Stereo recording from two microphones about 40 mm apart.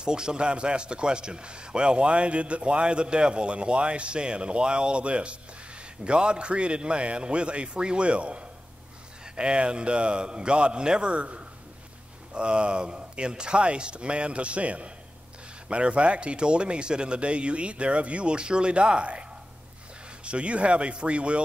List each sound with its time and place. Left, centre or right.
0.0 s speech: centre
20.2 s speech: right